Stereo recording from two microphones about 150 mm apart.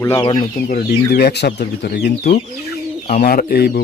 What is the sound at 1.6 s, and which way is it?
Speech, 80° left.